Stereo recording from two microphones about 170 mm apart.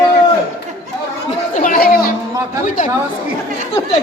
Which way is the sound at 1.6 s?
55° left (ahead or behind).